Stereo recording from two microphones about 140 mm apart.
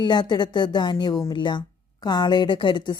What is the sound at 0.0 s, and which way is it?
A woman's voice, 30° left (ahead or behind).